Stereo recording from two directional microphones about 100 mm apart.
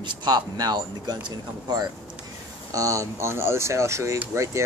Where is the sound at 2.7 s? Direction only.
35° right (ahead or behind).